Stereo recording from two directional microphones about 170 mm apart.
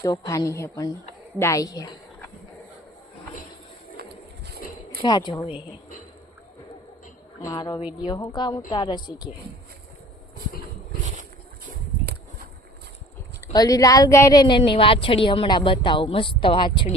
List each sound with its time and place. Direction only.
0.0 s a woman's voice: 20° left (ahead or behind)
4.0 s a sound: 65° right (ahead or behind)
5.0 s a woman's voice: 25° left (ahead or behind)
7.5 s a woman's voice: 25° left (ahead or behind)
13.5 s a woman's voice: 20° left (ahead or behind)